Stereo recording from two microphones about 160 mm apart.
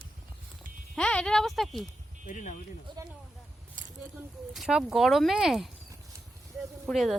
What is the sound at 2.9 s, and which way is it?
Speech, 30° right (ahead or behind).